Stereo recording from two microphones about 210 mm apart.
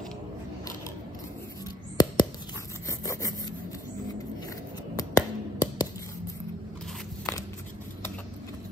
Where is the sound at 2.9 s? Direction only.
15° left (ahead or behind).